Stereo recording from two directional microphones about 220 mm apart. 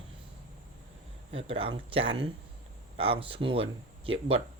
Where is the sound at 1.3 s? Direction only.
25° right (ahead or behind).